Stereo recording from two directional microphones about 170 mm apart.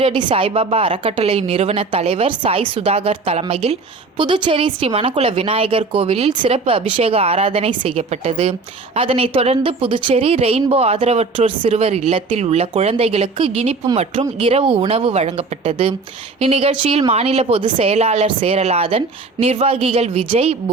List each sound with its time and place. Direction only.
0.0 s a woman's voice: 30° right (ahead or behind)